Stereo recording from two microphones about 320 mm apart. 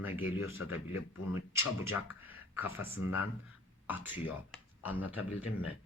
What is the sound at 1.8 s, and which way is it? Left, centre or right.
Speech, centre.